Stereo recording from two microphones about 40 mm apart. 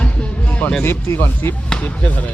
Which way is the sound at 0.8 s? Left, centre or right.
Left.